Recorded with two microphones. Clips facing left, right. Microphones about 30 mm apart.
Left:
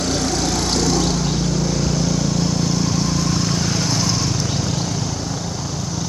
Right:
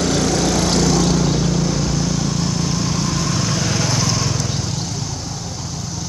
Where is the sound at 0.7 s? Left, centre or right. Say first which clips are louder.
Right 2 dB; right.